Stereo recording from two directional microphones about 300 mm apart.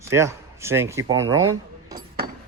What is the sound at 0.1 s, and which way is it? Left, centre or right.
Speech, centre.